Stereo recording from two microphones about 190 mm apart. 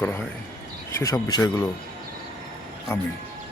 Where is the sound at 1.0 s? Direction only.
20° left (ahead or behind).